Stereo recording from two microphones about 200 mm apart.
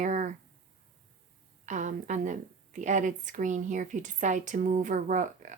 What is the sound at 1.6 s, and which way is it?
A woman's voice, 40° right (ahead or behind).